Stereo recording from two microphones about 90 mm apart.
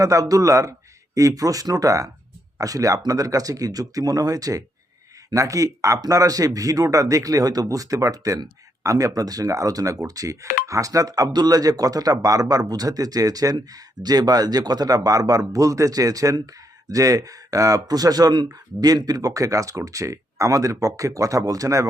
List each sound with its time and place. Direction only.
0.0 s speech: 40° right (ahead or behind)